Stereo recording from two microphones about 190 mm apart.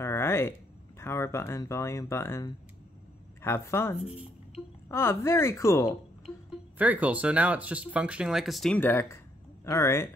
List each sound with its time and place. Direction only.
0.0 s a woman's voice: 15° left (ahead or behind)
6.8 s a woman's voice: 10° right (ahead or behind); by 10.0 s 15° left (ahead or behind)